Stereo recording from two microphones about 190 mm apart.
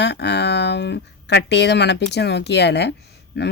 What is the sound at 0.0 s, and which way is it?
Speech, 65° left (ahead or behind).